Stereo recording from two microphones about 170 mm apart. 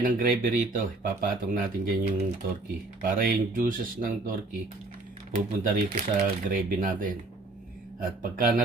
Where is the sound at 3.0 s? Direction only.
55° right (ahead or behind).